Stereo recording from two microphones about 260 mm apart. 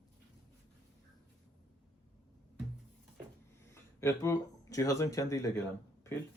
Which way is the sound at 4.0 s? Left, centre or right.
Centre.